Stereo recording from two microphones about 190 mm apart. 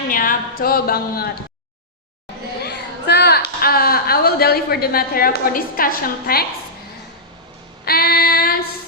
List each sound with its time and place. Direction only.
0.1 s speech: 45° left (ahead or behind)
2.6 s a sound: 60° left (ahead or behind)
7.9 s female singing: 55° left (ahead or behind)